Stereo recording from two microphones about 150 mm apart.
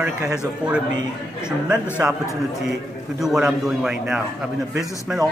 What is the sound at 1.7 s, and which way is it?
Speech, 5° right (ahead or behind).